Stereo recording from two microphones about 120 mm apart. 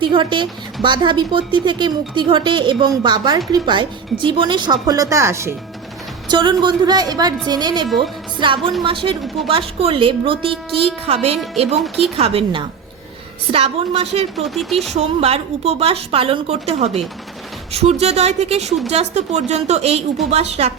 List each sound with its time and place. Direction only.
0.0 s a woman's voice: 40° right (ahead or behind); by 5.5 s 20° right (ahead or behind)
6.2 s a woman's voice: 40° right (ahead or behind)
7.9 s speech: centre (ahead or behind)
8.4 s a woman's voice: 45° right (ahead or behind); by 11.8 s 60° right (ahead or behind)
11.8 s speech: centre (ahead or behind)
12.1 s a woman's voice: 55° right (ahead or behind)
14.3 s speech: centre (ahead or behind)
14.9 s a woman's voice: 60° right (ahead or behind)